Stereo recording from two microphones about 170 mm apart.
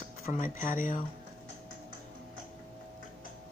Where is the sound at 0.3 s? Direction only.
50° left (ahead or behind).